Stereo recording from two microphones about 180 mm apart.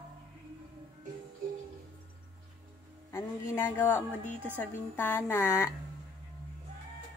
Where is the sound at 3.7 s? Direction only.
10° left (ahead or behind).